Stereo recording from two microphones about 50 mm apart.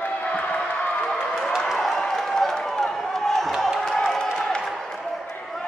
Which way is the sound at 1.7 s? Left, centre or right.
Centre.